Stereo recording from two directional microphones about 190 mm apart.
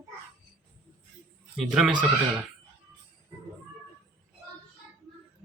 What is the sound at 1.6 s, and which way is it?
Speech, centre (ahead or behind).